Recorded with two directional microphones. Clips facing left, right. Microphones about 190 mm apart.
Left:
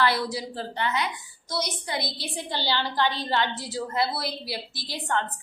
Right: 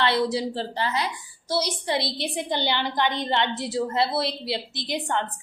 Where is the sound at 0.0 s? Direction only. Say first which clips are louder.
Right 3 dB; 25° right (ahead or behind).